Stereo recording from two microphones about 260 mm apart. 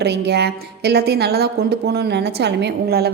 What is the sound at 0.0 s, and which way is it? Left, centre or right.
A woman's voice, right.